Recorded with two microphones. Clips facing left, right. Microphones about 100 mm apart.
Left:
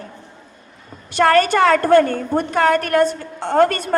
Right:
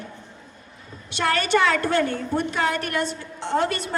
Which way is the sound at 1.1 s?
45° left (ahead or behind).